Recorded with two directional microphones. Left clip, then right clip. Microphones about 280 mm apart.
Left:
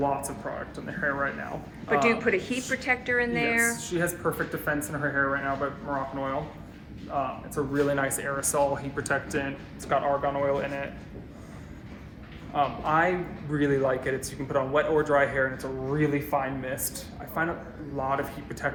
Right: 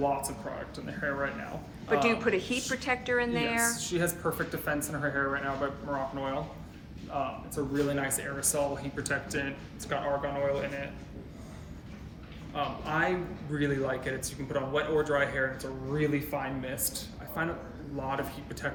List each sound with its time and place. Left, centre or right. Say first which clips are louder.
1.0 s a man's voice: left 4 dB; centre
7.1 s speech: left 4 dB; centre
12.5 s a man's voice: left 6 dB; centre